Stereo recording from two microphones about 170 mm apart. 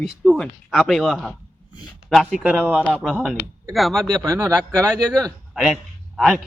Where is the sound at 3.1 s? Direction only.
5° right (ahead or behind).